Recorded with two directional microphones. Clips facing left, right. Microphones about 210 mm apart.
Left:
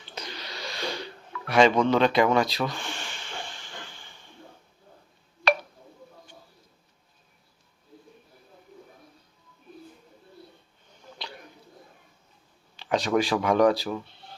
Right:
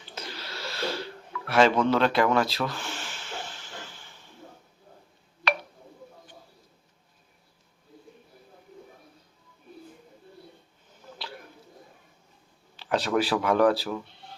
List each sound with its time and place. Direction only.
0.1 s wheeze: 5° right (ahead or behind)
1.8 s speech: 5° right (ahead or behind)
2.0 s speech: 20° left (ahead or behind)
2.3 s speech: centre (ahead or behind)
2.6 s snort: centre (ahead or behind)
12.7 s a sound: 5° right (ahead or behind)
13.1 s speech: 5° right (ahead or behind)